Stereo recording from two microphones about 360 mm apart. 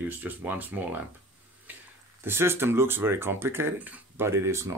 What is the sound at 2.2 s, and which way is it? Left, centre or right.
Speech, centre.